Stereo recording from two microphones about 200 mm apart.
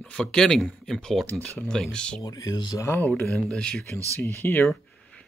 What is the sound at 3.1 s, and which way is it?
Speech, 5° left (ahead or behind).